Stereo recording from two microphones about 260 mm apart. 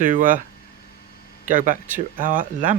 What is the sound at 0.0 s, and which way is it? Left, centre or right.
Speech, right.